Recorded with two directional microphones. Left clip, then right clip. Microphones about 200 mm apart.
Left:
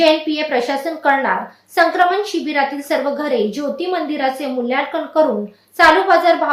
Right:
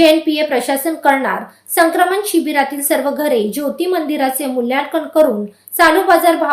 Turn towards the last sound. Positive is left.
turn(degrees=-40)  # may be behind; listen again after turning